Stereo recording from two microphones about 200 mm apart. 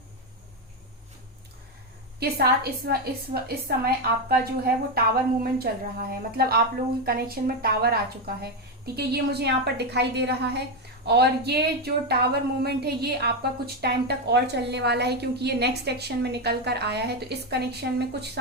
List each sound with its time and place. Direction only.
2.1 s a woman's voice: 50° right (ahead or behind)
9.0 s speech: 55° right (ahead or behind)